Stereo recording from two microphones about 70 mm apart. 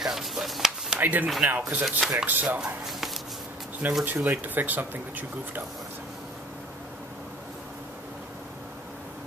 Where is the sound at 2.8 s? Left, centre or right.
Centre.